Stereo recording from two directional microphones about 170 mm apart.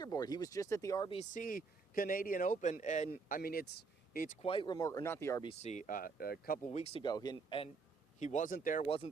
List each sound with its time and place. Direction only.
0.0 s speech: 20° left (ahead or behind)
1.1 s speech: 45° left (ahead or behind)
4.4 s speech: 30° left (ahead or behind)
5.4 s speech: 35° left (ahead or behind); by 6.7 s 60° left (ahead or behind)
6.7 s speech: 35° left (ahead or behind)
8.2 s speech: 45° left (ahead or behind)